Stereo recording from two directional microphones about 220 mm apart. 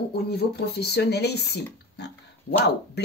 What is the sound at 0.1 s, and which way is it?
Speech, 45° left (ahead or behind).